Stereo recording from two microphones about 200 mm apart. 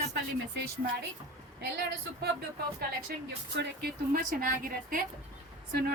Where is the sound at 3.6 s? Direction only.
50° right (ahead or behind).